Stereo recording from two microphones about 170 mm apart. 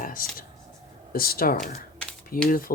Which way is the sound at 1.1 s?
60° left (ahead or behind).